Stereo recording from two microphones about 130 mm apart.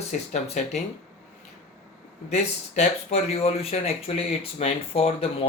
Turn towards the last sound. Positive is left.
turn(degrees=50)  # may be behind; listen again after turning